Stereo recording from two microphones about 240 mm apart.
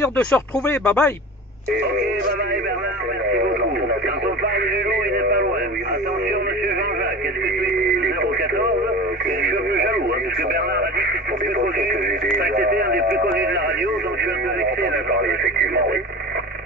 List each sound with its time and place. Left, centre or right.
0.0 s speech: centre
9.4 s radio: right
12.4 s speech: right